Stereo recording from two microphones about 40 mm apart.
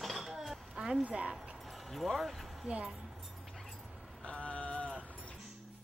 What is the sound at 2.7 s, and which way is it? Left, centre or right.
Speech, right.